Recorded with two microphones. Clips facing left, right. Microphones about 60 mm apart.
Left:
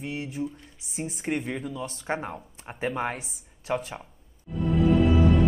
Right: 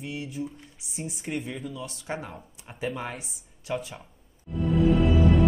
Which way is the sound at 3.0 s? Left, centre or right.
Left.